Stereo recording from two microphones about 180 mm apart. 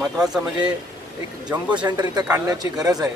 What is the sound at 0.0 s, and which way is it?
Speech, 5° right (ahead or behind).